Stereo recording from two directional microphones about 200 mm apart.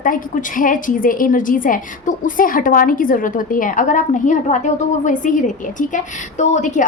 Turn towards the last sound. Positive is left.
turn(degrees=35)  # may be behind; listen again after turning